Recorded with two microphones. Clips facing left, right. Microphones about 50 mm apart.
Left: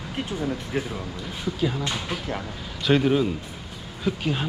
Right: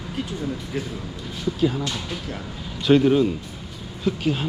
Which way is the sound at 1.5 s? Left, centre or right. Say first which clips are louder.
Right 4 dB; centre.